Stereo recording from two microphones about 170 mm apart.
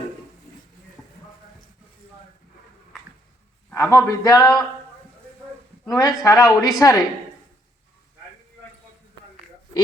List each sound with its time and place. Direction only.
3.7 s a man's voice: 15° left (ahead or behind)
5.9 s speech: 20° left (ahead or behind)